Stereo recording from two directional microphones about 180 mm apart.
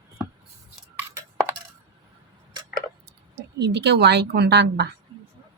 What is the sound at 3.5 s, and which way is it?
A woman's voice, 70° right (ahead or behind).